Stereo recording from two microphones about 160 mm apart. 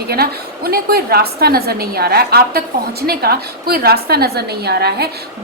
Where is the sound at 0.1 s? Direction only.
75° right (ahead or behind).